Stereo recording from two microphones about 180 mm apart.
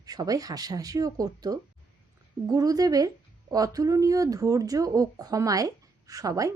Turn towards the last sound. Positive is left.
turn(degrees=-20)  # may be behind; listen again after turning